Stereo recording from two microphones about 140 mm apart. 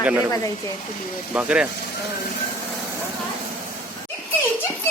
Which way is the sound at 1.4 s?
10° right (ahead or behind).